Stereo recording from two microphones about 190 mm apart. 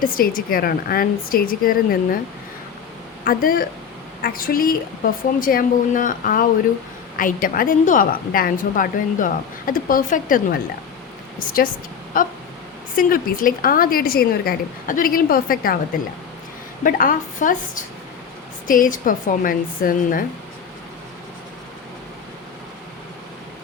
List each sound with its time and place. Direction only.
0.0 s a woman's voice: 50° left (ahead or behind)
3.2 s a woman's voice: 50° left (ahead or behind)
16.8 s a woman's voice: 45° left (ahead or behind)